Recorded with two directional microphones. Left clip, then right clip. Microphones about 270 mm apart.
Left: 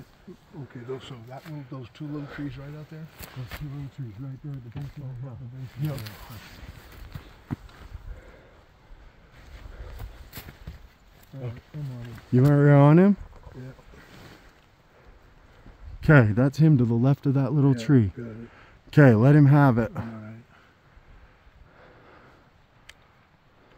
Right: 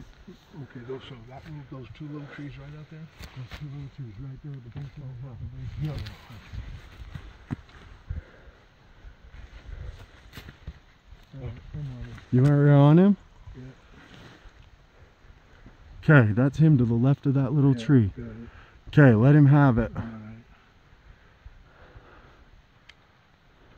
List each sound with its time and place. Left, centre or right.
0.8 s speech: left
2.1 s speech: centre
3.2 s speech: left
6.2 s speech: left
7.1 s walk: centre
12.4 s speech: centre
16.0 s speech: centre
21.7 s a sound: centre